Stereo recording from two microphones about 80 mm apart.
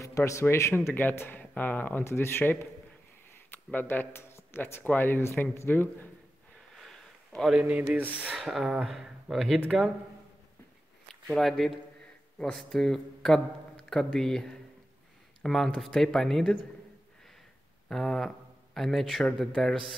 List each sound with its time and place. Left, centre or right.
0.0 s a man's voice: left
3.7 s a man's voice: left
6.7 s a sound: centre
8.4 s speech: centre
11.2 s speech: centre
17.8 s speech: centre